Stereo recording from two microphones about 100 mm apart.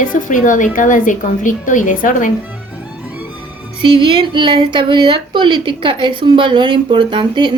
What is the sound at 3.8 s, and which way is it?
Speech, 60° right (ahead or behind).